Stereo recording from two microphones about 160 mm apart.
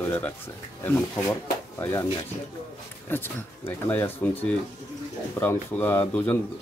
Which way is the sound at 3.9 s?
10° left (ahead or behind).